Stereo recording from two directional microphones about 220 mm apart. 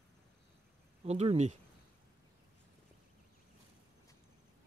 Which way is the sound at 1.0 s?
30° right (ahead or behind).